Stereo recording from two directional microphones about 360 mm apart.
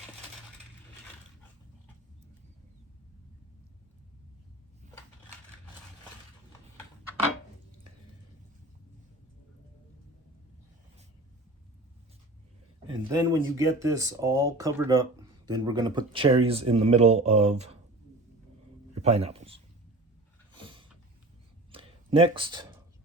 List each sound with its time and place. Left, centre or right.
12.9 s speech: centre
19.0 s speech: centre
20.6 s a sound: centre